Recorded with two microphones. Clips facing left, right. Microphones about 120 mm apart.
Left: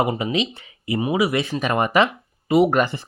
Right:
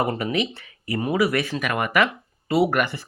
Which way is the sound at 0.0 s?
15° left (ahead or behind).